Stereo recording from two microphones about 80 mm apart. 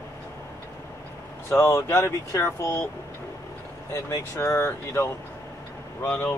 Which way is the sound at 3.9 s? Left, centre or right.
Left.